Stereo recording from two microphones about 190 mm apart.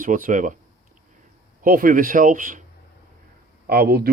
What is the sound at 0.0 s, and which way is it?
Speech, 45° right (ahead or behind).